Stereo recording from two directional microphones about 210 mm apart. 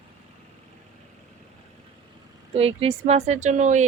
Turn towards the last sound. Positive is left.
turn(degrees=-35)  # may be behind; listen again after turning